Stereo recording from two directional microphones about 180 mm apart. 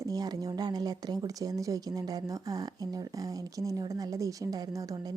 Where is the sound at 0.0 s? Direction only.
20° right (ahead or behind).